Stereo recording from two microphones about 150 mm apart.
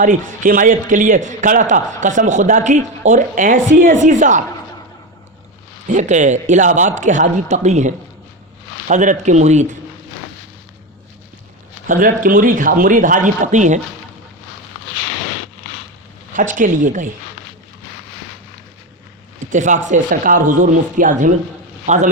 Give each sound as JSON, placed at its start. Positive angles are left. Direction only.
{"t": 0.0, "sound": "a man's voice", "side_deg": -60}
{"t": 5.9, "sound": "a man's voice", "side_deg": -55}
{"t": 11.9, "sound": "a man's voice", "side_deg": -65}
{"t": 16.3, "sound": "a man's voice", "side_deg": -60}
{"t": 19.5, "sound": "a man's voice", "side_deg": -55}
{"t": 21.8, "sound": "speech", "side_deg": -50}